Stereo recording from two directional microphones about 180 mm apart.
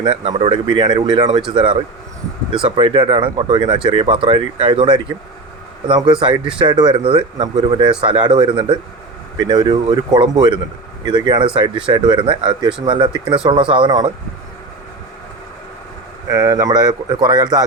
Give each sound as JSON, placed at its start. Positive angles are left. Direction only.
{"t": 0.0, "sound": "speech", "side_deg": -30}
{"t": 16.3, "sound": "speech", "side_deg": -20}